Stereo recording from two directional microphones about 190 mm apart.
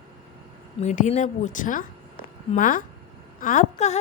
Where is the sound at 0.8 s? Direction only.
35° left (ahead or behind).